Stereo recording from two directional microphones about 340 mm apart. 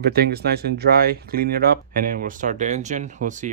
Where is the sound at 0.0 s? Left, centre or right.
Right.